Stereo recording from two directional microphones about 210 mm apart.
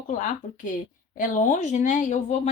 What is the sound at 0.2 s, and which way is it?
A woman's voice, 35° left (ahead or behind).